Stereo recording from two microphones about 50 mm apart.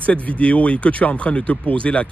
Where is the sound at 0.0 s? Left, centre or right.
Left.